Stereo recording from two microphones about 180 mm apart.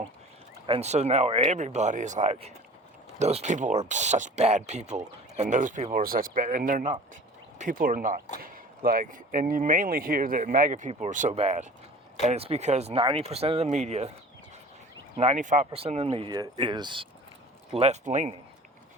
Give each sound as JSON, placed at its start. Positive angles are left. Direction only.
{"t": 0.7, "sound": "speech", "side_deg": -35}
{"t": 15.2, "sound": "speech", "side_deg": -40}
{"t": 17.7, "sound": "speech", "side_deg": -40}